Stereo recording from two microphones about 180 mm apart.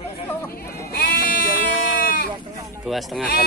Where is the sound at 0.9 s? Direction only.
60° left (ahead or behind).